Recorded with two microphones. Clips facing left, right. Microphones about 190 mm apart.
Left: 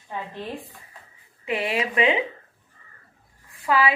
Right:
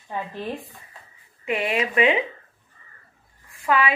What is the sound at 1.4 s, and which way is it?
Speech, 30° left (ahead or behind).